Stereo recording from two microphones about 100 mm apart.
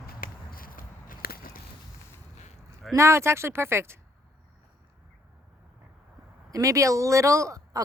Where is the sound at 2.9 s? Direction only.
30° right (ahead or behind).